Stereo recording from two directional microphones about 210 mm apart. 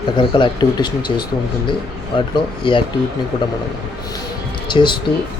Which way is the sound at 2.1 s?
20° left (ahead or behind).